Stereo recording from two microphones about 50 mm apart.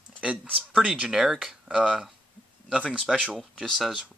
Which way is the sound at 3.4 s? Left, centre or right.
Centre.